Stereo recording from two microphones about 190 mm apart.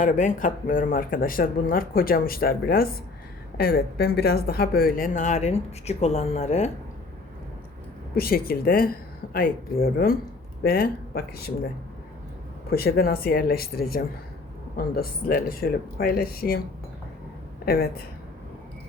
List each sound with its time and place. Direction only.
0.0 s speech: 45° left (ahead or behind)
8.1 s speech: 50° left (ahead or behind)
12.7 s speech: 55° left (ahead or behind)
17.7 s speech: 55° left (ahead or behind)